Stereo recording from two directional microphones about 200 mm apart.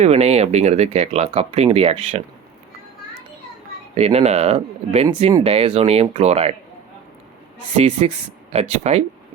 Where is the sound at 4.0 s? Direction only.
30° right (ahead or behind).